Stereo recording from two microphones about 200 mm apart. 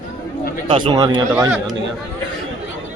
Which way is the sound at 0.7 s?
25° right (ahead or behind).